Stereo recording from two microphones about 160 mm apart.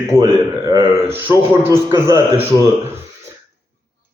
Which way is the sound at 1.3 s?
15° right (ahead or behind).